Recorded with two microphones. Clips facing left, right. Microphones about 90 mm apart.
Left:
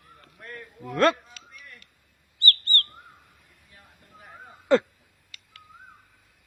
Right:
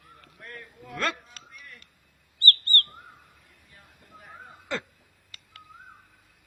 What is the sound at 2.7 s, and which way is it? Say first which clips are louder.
Bird: right 1 dB; 20° left (ahead or behind).